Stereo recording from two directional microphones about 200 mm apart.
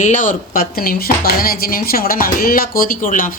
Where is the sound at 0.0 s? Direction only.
40° left (ahead or behind).